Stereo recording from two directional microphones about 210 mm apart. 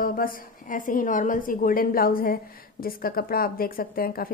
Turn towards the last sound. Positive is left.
turn(degrees=45)  # may be behind; listen again after turning